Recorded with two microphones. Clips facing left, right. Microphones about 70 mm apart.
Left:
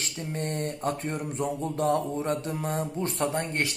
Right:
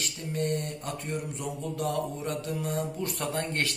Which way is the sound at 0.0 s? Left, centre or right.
Left.